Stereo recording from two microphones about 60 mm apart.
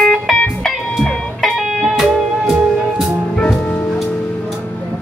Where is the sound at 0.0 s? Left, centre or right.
Centre.